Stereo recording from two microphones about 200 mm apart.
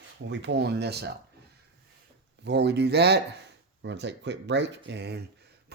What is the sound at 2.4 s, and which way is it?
Speech, 60° right (ahead or behind).